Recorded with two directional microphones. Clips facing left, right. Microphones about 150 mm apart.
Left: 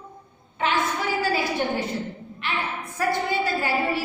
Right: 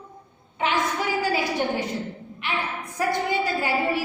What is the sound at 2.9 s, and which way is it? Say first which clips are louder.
A woman's voice: even; 15° right (ahead or behind).